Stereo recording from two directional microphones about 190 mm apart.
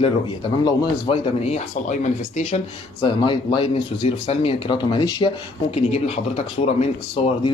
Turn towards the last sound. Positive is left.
turn(degrees=30)  # may be behind; listen again after turning